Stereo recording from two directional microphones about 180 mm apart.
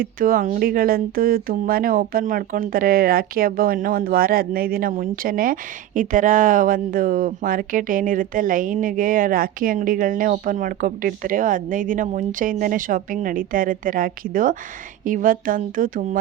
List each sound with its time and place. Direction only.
0.0 s speech: 50° right (ahead or behind)